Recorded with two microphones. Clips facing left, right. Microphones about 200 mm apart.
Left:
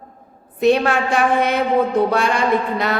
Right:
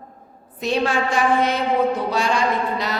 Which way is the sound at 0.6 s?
60° left (ahead or behind).